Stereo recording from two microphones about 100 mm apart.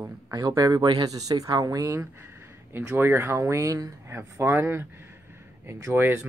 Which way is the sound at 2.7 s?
20° right (ahead or behind).